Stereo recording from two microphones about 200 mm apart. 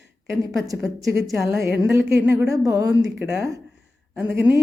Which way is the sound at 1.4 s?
5° right (ahead or behind).